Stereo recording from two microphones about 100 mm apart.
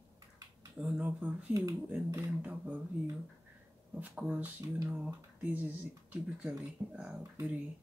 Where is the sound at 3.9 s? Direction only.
15° right (ahead or behind).